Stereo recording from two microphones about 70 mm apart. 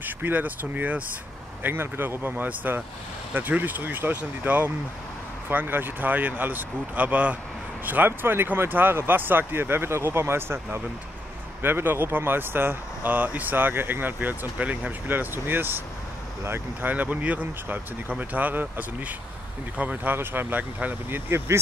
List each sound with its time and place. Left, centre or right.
0.0 s speech: right
16.9 s speech: right